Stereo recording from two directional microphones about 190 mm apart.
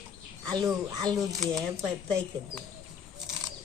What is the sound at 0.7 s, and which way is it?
Speech, centre (ahead or behind).